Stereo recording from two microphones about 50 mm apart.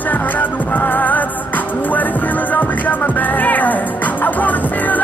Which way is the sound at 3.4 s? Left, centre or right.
Left.